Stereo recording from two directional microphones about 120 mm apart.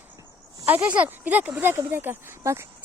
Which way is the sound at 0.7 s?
10° right (ahead or behind).